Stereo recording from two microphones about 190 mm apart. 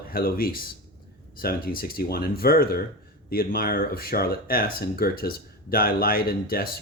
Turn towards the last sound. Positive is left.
turn(degrees=50)  # may be behind; listen again after turning